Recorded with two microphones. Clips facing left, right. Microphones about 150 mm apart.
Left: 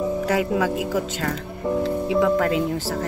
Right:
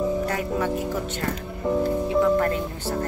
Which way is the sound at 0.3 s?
90° left.